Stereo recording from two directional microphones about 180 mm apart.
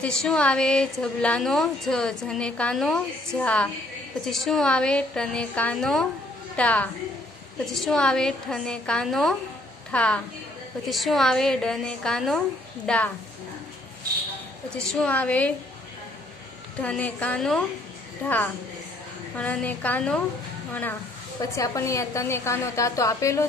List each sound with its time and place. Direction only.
0.0 s a woman's voice: 5° left (ahead or behind)
14.7 s a woman's voice: 5° left (ahead or behind)
16.8 s a woman's voice: 5° left (ahead or behind)
19.3 s a woman's voice: 5° left (ahead or behind)
21.4 s a woman's voice: 20° left (ahead or behind)